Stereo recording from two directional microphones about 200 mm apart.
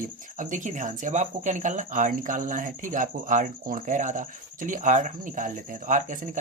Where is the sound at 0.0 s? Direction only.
40° right (ahead or behind).